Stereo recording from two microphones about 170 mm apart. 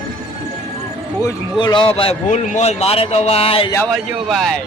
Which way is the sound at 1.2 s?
25° left (ahead or behind).